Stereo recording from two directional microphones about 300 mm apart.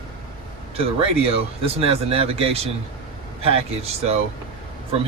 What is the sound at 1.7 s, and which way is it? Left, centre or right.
Speech, centre.